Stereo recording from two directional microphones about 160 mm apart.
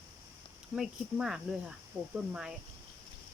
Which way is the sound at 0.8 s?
5° right (ahead or behind).